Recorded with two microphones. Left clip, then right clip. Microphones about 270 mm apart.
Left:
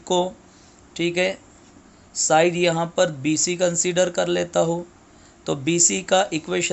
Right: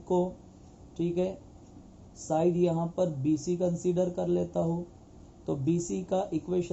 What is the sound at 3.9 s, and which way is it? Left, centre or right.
Speech, left.